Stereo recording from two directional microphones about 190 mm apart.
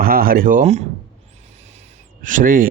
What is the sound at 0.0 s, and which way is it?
Speech, 50° right (ahead or behind).